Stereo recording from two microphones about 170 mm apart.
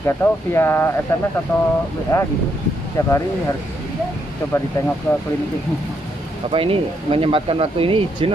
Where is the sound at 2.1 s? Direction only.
15° left (ahead or behind).